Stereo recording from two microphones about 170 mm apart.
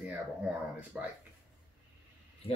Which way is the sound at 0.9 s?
5° right (ahead or behind).